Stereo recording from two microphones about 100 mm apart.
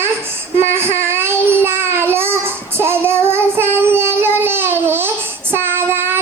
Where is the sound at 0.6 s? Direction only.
25° right (ahead or behind).